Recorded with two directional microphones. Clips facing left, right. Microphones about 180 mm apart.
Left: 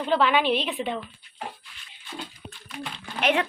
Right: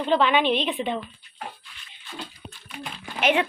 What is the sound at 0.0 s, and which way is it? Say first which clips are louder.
A woman's voice: right 1 dB; 5° left (ahead or behind).